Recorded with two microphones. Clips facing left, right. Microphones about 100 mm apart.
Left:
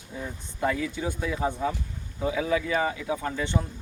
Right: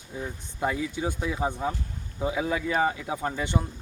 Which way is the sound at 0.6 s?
15° right (ahead or behind).